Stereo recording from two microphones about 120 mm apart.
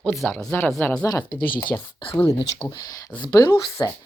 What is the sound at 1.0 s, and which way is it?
Speech, 35° left (ahead or behind).